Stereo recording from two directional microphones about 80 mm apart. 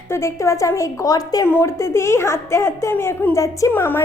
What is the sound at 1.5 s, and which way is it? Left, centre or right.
A woman's voice, left.